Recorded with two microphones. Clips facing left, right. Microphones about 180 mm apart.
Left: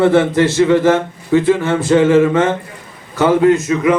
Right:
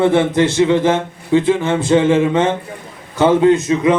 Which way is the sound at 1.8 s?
20° right (ahead or behind).